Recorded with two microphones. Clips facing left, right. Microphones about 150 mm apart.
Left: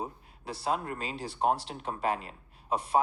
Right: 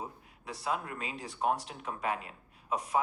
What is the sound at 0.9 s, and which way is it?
Speech, 30° left (ahead or behind).